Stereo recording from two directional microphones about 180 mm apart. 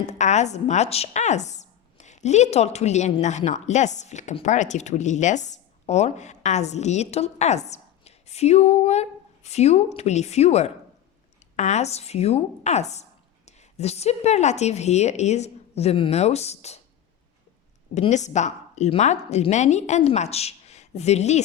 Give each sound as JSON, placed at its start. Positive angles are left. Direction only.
{"t": 0.1, "sound": "a woman's voice", "side_deg": 40}
{"t": 17.9, "sound": "a woman's voice", "side_deg": 40}